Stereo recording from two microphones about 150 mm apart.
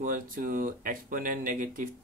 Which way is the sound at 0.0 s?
70° right (ahead or behind).